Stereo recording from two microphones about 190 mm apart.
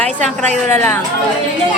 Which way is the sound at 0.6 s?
10° left (ahead or behind).